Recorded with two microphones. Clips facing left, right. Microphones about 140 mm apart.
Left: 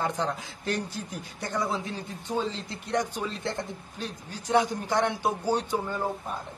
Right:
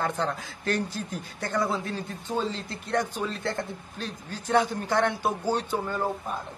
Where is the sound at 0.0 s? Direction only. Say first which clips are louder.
Right 1 dB; 15° left (ahead or behind).